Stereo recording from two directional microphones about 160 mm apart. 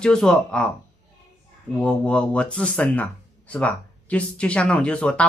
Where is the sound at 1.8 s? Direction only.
5° left (ahead or behind).